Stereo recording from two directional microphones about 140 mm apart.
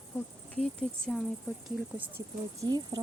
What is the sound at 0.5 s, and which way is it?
Speech, 5° left (ahead or behind).